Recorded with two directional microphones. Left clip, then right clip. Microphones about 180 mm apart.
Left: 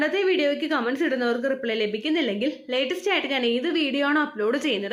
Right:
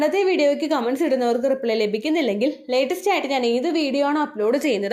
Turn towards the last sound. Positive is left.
turn(degrees=-25)  # may be behind; listen again after turning